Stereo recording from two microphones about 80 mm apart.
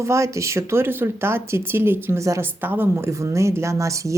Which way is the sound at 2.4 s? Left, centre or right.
Right.